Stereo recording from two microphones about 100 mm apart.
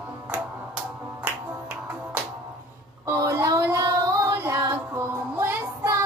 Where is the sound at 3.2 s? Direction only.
30° right (ahead or behind).